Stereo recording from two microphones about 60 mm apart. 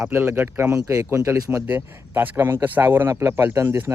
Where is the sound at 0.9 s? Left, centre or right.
Right.